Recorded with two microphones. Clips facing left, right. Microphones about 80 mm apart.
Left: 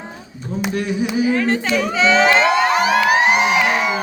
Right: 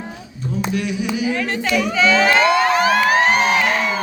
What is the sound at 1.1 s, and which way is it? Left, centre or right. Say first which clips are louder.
Crowd: left 6 dB; left.